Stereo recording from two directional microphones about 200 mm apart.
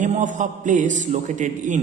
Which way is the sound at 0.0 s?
40° right (ahead or behind).